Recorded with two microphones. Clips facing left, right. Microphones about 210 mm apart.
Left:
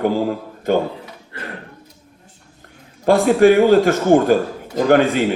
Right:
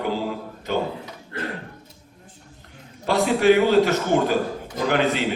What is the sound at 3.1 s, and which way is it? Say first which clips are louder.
A man's voice: left 6 dB; 50° left (ahead or behind).